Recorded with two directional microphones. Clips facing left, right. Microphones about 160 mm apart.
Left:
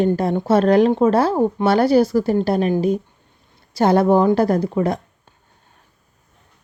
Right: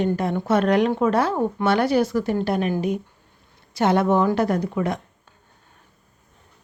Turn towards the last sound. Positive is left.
turn(degrees=35)  # may be behind; listen again after turning